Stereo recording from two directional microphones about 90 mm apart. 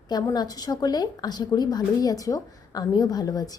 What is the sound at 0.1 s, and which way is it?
A woman's voice, 50° left (ahead or behind).